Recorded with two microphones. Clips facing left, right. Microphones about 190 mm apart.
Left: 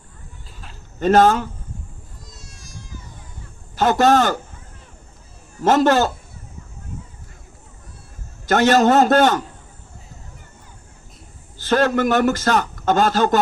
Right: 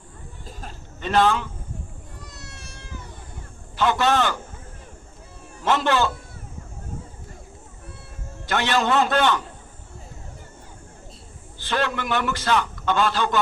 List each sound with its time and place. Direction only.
0.9 s a man's voice: 45° left (ahead or behind)
2.2 s a sound: 65° right (ahead or behind)
3.8 s a man's voice: 45° left (ahead or behind)
5.5 s a man's voice: 45° left (ahead or behind)
8.4 s a man's voice: 45° left (ahead or behind)
11.5 s a man's voice: 45° left (ahead or behind)